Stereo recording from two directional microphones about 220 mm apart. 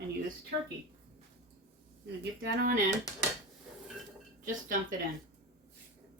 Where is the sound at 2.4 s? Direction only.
40° right (ahead or behind).